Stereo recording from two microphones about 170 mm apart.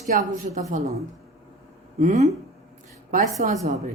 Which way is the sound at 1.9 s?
45° right (ahead or behind).